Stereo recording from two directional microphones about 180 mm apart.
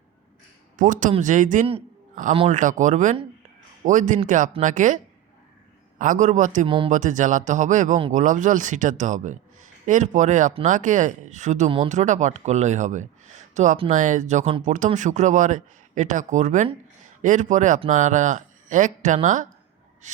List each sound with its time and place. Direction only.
0.8 s a man's voice: 45° right (ahead or behind)
2.6 s a man's voice: 45° right (ahead or behind)
6.0 s a man's voice: 45° right (ahead or behind)
6.7 s speech: 30° right (ahead or behind)
6.9 s a man's voice: 45° right (ahead or behind)